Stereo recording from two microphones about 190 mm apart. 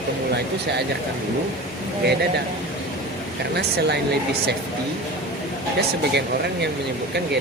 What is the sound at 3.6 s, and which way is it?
Speech, 60° right (ahead or behind).